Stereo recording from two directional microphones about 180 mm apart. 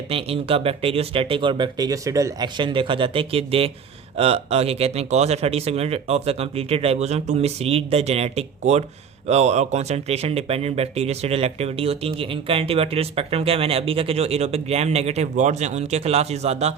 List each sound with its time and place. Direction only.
0.1 s speech: 30° right (ahead or behind)